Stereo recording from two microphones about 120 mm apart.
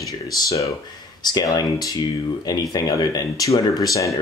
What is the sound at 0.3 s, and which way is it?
Speech, 30° left (ahead or behind).